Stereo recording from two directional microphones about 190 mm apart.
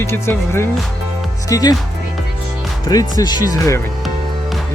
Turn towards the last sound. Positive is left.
turn(degrees=15)  # may be behind; listen again after turning